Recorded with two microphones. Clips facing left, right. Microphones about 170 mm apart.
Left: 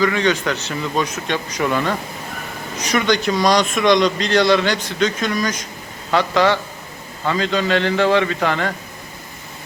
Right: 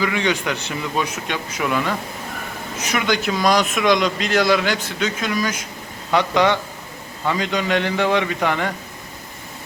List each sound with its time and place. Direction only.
0.0 s a man's voice: 10° right (ahead or behind)
6.1 s speech: 15° right (ahead or behind)